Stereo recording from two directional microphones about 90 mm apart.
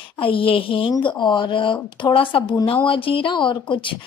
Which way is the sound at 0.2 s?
85° left.